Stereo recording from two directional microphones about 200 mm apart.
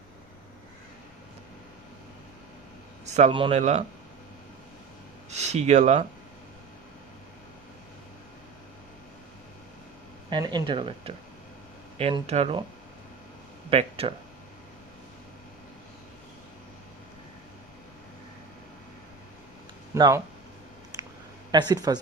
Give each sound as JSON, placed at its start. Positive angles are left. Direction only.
{"t": 3.2, "sound": "speech", "side_deg": -30}
{"t": 5.3, "sound": "speech", "side_deg": -35}
{"t": 10.2, "sound": "speech", "side_deg": -20}
{"t": 13.7, "sound": "speech", "side_deg": -30}
{"t": 19.9, "sound": "speech", "side_deg": -15}
{"t": 20.9, "sound": "a sound", "side_deg": -20}
{"t": 21.5, "sound": "speech", "side_deg": -20}